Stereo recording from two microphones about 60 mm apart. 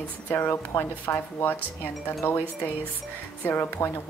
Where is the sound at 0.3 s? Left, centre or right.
Left.